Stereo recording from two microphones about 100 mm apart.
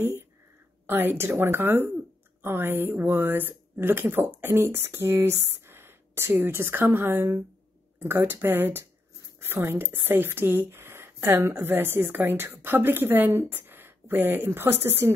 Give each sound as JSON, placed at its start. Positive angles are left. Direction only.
{"t": 0.0, "sound": "a woman's voice", "side_deg": -25}